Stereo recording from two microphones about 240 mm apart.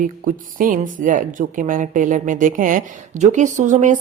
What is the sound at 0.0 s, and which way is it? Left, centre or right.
Speech, right.